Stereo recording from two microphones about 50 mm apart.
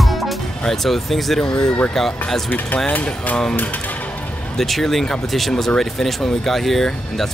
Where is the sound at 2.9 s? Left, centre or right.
Left.